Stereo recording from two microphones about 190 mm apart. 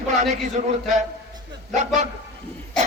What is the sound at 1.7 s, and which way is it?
Speech, 40° right (ahead or behind).